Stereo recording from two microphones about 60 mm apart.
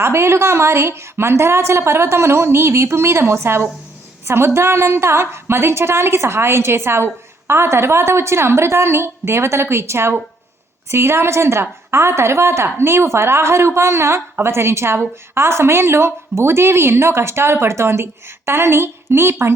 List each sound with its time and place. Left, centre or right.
0.0 s a woman's voice: right